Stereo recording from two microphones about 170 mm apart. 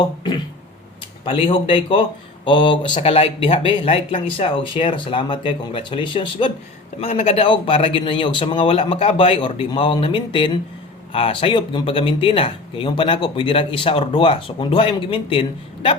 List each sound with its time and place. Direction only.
1.2 s speech: 30° left (ahead or behind)